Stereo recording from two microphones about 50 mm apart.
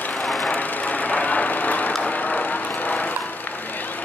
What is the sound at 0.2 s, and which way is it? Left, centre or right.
Vehicle, centre.